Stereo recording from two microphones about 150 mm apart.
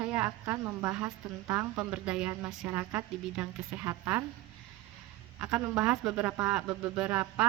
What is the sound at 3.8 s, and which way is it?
Speech, 20° right (ahead or behind).